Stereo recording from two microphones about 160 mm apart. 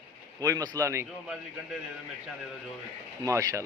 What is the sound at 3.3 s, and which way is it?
Speech, 20° right (ahead or behind).